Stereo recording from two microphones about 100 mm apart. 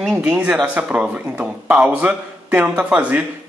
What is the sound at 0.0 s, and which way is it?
Speech, 10° right (ahead or behind).